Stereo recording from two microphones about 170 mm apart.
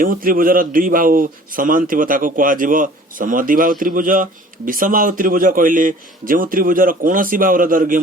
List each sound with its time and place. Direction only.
0.0 s a man's voice: 55° right (ahead or behind)